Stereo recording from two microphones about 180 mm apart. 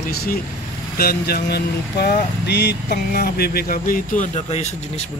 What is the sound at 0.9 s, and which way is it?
Speech, 60° left (ahead or behind).